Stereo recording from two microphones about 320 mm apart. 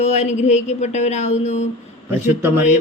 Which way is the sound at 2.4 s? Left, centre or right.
Centre.